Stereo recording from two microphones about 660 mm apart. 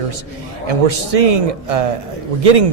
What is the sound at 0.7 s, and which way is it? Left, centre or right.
A man's voice, right.